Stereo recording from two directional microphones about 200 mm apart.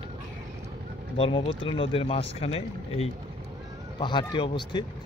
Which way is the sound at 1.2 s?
25° left (ahead or behind).